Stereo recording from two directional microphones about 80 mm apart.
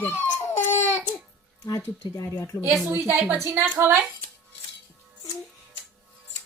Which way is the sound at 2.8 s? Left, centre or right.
Right.